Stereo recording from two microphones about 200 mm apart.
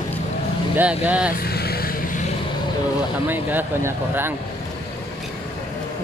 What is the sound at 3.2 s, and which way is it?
Speech, 10° right (ahead or behind).